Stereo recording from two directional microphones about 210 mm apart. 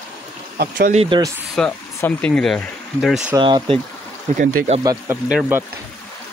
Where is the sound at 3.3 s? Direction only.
20° right (ahead or behind).